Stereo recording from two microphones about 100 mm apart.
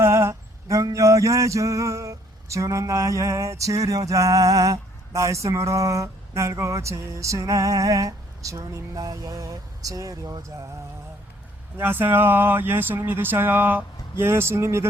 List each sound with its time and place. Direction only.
0.0 s male singing: 25° right (ahead or behind)
11.8 s speech: 20° right (ahead or behind)